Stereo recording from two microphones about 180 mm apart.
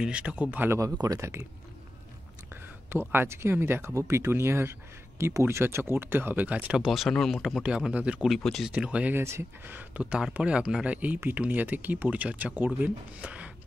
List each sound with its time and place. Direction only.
0.0 s speech: 5° right (ahead or behind)
2.5 s speech: 10° right (ahead or behind)